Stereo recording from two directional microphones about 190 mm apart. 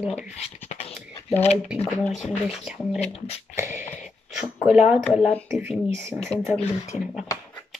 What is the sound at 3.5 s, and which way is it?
Speech, 15° right (ahead or behind).